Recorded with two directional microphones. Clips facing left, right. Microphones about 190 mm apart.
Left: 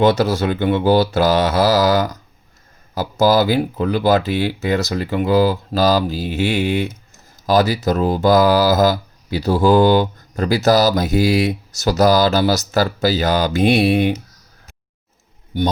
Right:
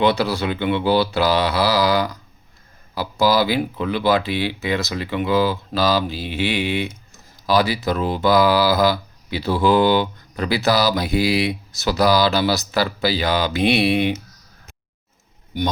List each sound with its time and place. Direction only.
0.0 s speech: 45° left (ahead or behind)